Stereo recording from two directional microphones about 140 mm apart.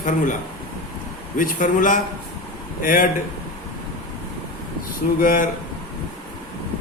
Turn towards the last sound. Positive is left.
turn(degrees=80)